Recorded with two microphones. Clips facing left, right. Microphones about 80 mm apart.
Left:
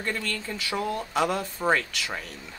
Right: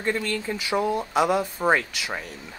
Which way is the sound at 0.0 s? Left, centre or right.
Centre.